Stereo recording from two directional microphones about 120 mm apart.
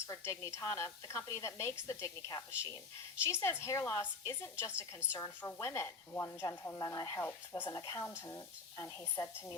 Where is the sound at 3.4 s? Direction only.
20° left (ahead or behind).